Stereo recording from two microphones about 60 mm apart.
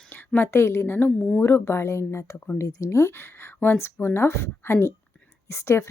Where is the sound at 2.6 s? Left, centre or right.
Left.